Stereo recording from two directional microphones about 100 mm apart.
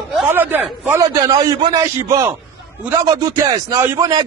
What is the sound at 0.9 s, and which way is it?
Speech, 35° right (ahead or behind).